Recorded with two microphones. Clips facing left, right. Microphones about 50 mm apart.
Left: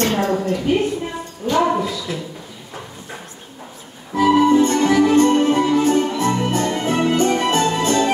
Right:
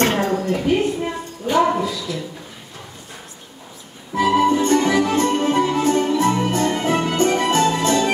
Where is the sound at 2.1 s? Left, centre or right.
Left.